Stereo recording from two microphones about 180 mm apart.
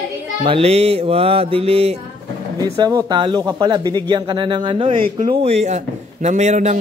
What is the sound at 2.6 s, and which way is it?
Speech, 20° right (ahead or behind).